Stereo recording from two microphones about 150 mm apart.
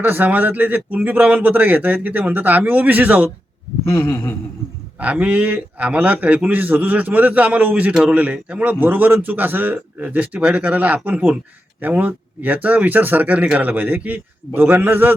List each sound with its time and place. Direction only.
0.0 s a man's voice: 10° right (ahead or behind)
3.8 s a sound: 15° left (ahead or behind)
4.9 s a man's voice: 10° right (ahead or behind)